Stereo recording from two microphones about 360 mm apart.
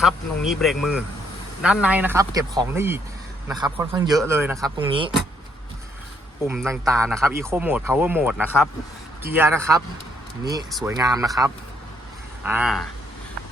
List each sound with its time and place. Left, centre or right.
0.0 s speech: centre
4.9 s speech: centre
6.5 s speech: centre